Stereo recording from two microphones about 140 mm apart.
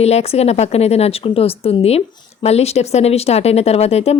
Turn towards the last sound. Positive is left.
turn(degrees=50)  # may be behind; listen again after turning